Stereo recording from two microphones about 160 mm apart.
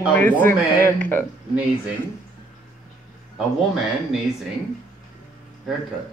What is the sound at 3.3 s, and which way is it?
Speech, 5° right (ahead or behind).